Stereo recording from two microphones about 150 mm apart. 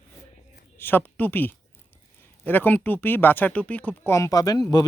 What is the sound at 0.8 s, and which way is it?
Speech, 15° left (ahead or behind).